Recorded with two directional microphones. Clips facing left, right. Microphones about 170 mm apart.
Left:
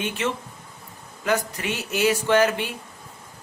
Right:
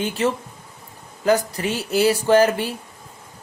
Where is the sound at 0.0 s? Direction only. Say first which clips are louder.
Right 5 dB; 35° right (ahead or behind).